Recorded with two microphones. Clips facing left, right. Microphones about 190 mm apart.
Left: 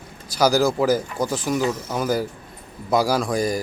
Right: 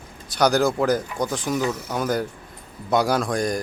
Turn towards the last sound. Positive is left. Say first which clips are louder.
# left 1 dB
turn(degrees=5)  # may be behind; listen again after turning